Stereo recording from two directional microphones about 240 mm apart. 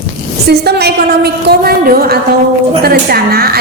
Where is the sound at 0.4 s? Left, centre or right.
Right.